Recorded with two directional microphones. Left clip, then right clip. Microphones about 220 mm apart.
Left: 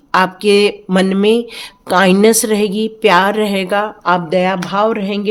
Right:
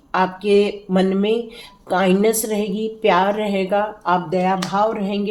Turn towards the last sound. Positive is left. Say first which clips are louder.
# left 4 dB
turn(degrees=50)  # may be behind; listen again after turning